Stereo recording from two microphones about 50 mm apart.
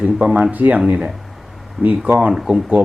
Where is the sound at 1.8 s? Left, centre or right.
Centre.